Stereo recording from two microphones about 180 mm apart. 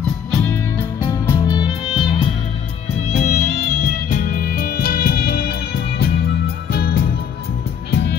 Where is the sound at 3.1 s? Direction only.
40° left (ahead or behind).